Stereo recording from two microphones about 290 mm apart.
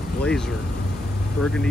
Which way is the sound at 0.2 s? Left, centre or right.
Centre.